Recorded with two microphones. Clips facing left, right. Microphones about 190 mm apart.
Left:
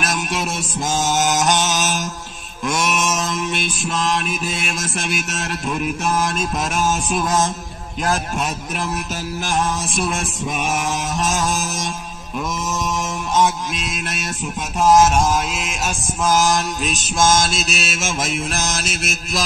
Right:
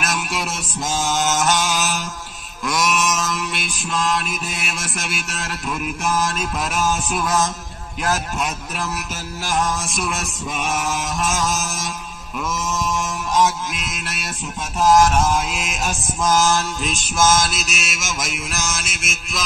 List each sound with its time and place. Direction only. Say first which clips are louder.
0.9 s mantra: left 2 dB; 20° left (ahead or behind)
9.8 s mantra: left 3 dB; 30° left (ahead or behind)
13.3 s mantra: left 1 dB; 25° left (ahead or behind)
15.3 s mantra: left 1 dB; centre (ahead or behind)
16.3 s mantra: left 1 dB; 15° left (ahead or behind); by 19.4 s 35° left (ahead or behind)